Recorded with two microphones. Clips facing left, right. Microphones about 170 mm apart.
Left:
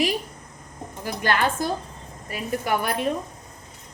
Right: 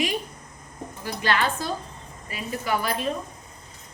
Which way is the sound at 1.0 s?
50° left (ahead or behind).